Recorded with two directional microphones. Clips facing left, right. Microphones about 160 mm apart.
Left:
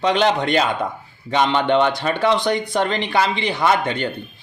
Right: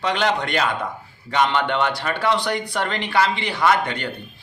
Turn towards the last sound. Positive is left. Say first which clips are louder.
# left 1 dB
turn(degrees=25)  # may be behind; listen again after turning